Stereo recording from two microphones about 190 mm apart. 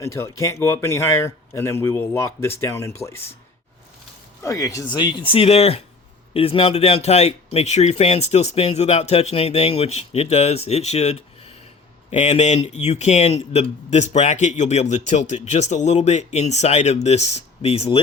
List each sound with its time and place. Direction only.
0.0 s speech: 15° left (ahead or behind)
4.4 s speech: 15° left (ahead or behind); by 18.0 s 35° left (ahead or behind)